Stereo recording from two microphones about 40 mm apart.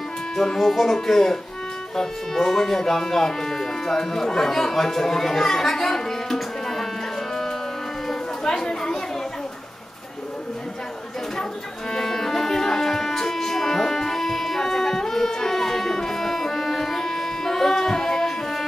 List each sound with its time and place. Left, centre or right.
0.4 s speech: centre
8.5 s speech: centre
11.9 s music: centre